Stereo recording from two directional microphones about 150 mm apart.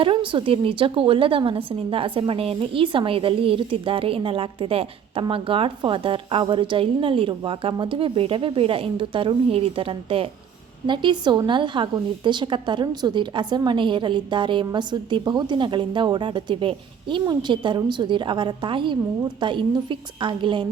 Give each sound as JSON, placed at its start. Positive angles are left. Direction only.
{"t": 0.0, "sound": "a woman's voice", "side_deg": -35}